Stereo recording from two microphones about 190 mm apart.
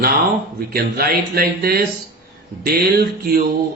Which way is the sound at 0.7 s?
50° right (ahead or behind).